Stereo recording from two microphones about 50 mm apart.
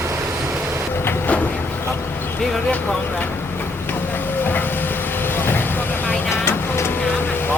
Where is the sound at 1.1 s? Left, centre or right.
Left.